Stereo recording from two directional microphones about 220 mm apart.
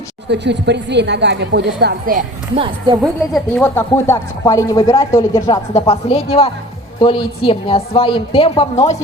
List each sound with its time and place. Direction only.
0.3 s speech: 50° right (ahead or behind)
2.6 s a woman's voice: 20° right (ahead or behind)
3.0 s speech: 5° left (ahead or behind)
5.9 s a woman's voice: 25° left (ahead or behind)